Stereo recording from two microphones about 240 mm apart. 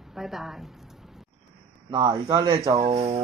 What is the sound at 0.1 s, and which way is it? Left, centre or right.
Speech, centre.